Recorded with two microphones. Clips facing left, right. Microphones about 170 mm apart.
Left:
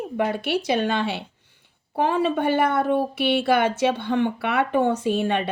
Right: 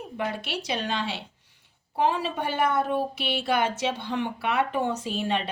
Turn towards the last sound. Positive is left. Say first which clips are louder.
# left 6 dB
turn(degrees=60)  # may be behind; listen again after turning